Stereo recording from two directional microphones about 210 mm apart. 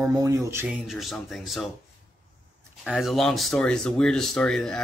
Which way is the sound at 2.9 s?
Centre (ahead or behind).